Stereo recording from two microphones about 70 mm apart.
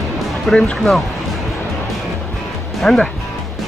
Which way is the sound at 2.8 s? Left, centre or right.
Centre.